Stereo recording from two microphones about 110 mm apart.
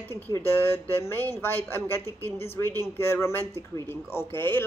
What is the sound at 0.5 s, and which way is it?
A woman's voice, 20° left (ahead or behind).